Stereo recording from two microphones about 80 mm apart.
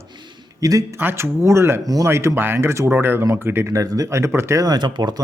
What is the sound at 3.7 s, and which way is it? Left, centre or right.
Speech, right.